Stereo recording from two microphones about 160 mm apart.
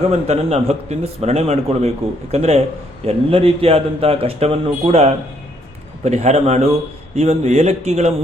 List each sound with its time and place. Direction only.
0.0 s a man's voice: 40° right (ahead or behind)